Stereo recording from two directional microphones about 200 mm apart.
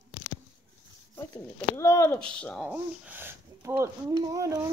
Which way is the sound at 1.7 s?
15° left (ahead or behind).